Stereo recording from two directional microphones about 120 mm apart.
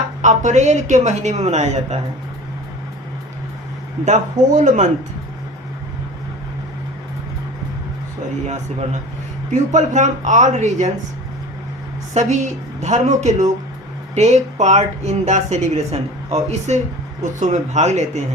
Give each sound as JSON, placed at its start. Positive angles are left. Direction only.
{"t": 0.2, "sound": "a woman's voice", "side_deg": -90}
{"t": 4.0, "sound": "speech", "side_deg": -85}
{"t": 9.5, "sound": "speech", "side_deg": -85}
{"t": 12.1, "sound": "speech", "side_deg": -80}
{"t": 14.2, "sound": "a woman's voice", "side_deg": -70}